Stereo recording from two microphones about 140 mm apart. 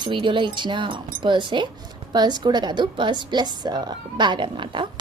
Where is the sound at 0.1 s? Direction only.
35° right (ahead or behind).